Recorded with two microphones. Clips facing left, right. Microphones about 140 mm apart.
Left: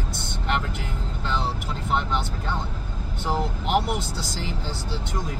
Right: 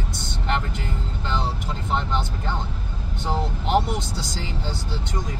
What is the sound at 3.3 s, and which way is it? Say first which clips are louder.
Speech: right 1 dB; 5° left (ahead or behind).